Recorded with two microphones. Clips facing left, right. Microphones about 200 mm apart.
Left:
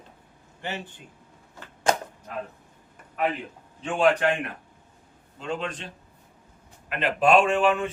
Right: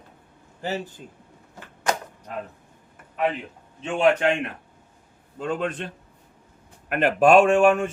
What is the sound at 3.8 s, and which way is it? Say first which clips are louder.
Speech: right 2 dB; 20° right (ahead or behind).